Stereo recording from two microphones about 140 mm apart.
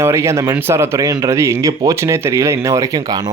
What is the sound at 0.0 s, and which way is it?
Speech, 20° right (ahead or behind).